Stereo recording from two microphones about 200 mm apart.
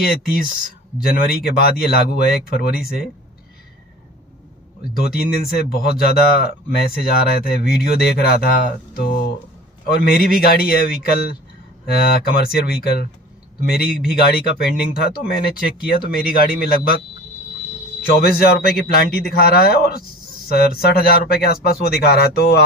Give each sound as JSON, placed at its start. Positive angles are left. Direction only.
{"t": 0.0, "sound": "speech", "side_deg": 50}
{"t": 4.8, "sound": "speech", "side_deg": 50}
{"t": 14.1, "sound": "speech", "side_deg": 50}
{"t": 18.0, "sound": "speech", "side_deg": 50}